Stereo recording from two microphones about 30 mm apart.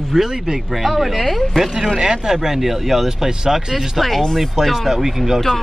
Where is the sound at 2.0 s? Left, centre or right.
Centre.